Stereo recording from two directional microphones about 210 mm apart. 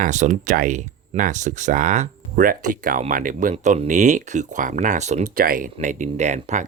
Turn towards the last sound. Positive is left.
turn(degrees=-35)  # may be behind; listen again after turning